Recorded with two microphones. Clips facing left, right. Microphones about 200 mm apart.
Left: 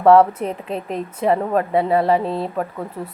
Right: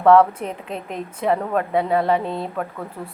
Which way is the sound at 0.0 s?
30° left (ahead or behind).